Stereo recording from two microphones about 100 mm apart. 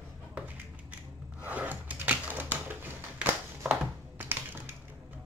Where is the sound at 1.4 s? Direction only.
15° right (ahead or behind).